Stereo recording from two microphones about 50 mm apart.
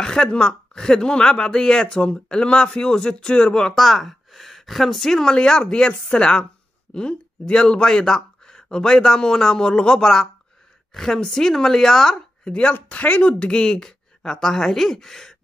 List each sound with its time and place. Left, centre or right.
0.0 s speech: centre
3.7 s a woman's voice: centre
12.4 s speech: left